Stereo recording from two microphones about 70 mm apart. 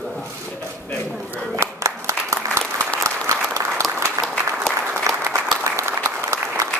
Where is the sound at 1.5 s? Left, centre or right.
Right.